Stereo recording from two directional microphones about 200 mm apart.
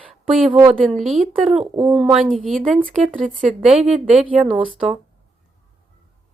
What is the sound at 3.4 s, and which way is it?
A woman's voice, 5° right (ahead or behind).